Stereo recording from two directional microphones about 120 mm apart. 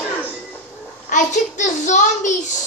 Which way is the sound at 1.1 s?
90° left.